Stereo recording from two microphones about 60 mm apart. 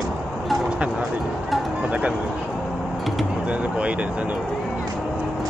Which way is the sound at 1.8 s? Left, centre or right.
Right.